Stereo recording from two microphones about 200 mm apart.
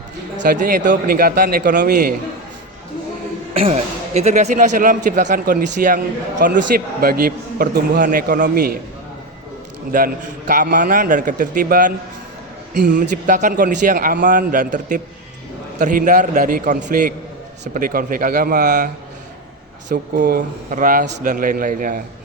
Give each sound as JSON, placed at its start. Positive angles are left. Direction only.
{"t": 0.3, "sound": "a man's voice", "side_deg": -50}
{"t": 3.5, "sound": "a man's voice", "side_deg": -30}
{"t": 9.9, "sound": "a man's voice", "side_deg": -45}
{"t": 19.9, "sound": "a man's voice", "side_deg": -55}